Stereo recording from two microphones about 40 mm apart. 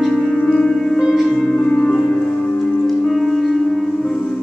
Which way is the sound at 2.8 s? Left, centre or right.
Centre.